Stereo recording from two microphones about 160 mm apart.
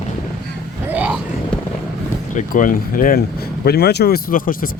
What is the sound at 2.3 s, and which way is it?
Speech, 55° left (ahead or behind).